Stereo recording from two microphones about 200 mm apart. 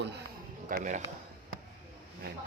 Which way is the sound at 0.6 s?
40° right (ahead or behind).